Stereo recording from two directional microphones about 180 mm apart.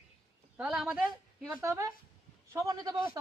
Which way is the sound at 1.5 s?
15° right (ahead or behind).